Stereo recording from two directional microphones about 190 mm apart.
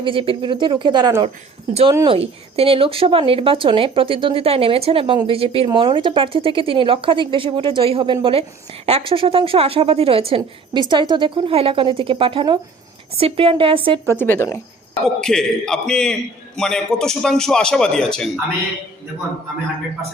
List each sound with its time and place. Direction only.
0.0 s speech: 30° right (ahead or behind)
2.1 s speech: 30° right (ahead or behind)
14.2 s speech: 10° left (ahead or behind)
15.0 s a man's voice: 5° left (ahead or behind)